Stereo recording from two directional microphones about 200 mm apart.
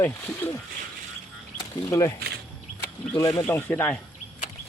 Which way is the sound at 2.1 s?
50° right (ahead or behind).